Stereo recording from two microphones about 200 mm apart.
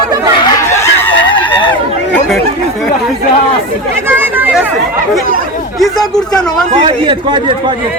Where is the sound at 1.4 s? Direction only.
10° left (ahead or behind).